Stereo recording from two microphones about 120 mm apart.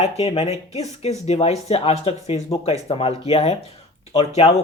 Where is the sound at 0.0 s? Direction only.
60° left (ahead or behind).